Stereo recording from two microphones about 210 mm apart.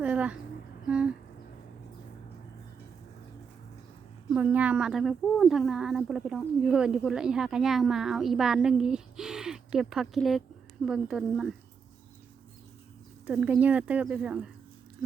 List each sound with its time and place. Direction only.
0.0 s a sound: 5° right (ahead or behind)
4.3 s speech: 5° right (ahead or behind)
13.2 s speech: 5° right (ahead or behind)